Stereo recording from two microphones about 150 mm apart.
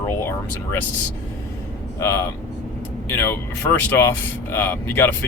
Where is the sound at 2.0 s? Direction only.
15° left (ahead or behind).